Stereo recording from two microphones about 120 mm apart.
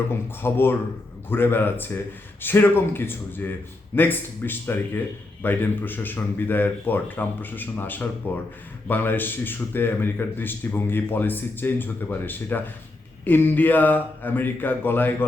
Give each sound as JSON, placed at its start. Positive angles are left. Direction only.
{"t": 0.1, "sound": "speech", "side_deg": 20}